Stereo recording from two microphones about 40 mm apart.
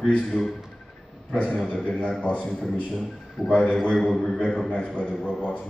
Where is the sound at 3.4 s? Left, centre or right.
Centre.